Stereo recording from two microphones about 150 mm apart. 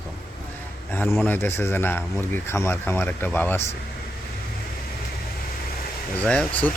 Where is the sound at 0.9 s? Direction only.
15° left (ahead or behind).